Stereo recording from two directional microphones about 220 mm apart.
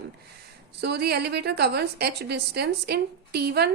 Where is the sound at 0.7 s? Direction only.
50° right (ahead or behind).